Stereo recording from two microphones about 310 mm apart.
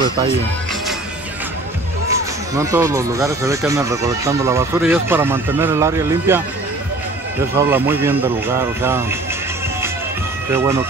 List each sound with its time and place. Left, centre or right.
2.5 s speech: centre
7.5 s speech: centre
10.5 s speech: centre